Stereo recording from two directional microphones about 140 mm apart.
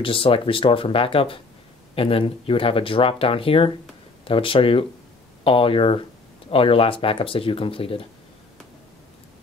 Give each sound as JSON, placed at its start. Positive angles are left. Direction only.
{"t": 0.0, "sound": "speech", "side_deg": 40}